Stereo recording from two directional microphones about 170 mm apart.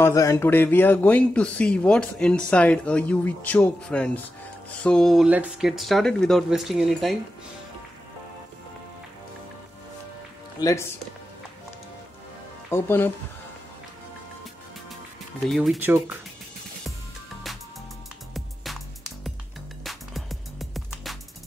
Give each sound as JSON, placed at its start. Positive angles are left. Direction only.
{"t": 0.0, "sound": "speech", "side_deg": 20}
{"t": 10.6, "sound": "speech", "side_deg": 20}
{"t": 12.6, "sound": "speech", "side_deg": 15}
{"t": 15.4, "sound": "speech", "side_deg": 0}
{"t": 15.8, "sound": "speech", "side_deg": -10}
{"t": 18.3, "sound": "music", "side_deg": 0}
{"t": 19.8, "sound": "music", "side_deg": 0}